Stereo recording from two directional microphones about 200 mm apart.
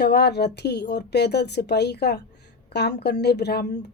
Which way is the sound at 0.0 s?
55° left (ahead or behind).